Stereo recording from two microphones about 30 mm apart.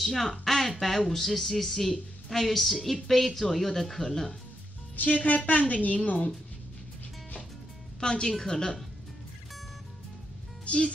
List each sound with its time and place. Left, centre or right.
0.0 s speech: centre
4.9 s a woman's voice: left
8.0 s a woman's voice: left
10.6 s music: left